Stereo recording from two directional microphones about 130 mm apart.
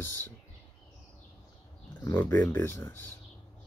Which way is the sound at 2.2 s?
15° left (ahead or behind).